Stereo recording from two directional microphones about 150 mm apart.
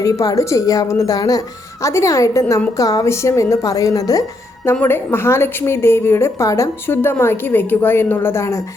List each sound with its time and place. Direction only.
0.0 s a woman's voice: 20° left (ahead or behind)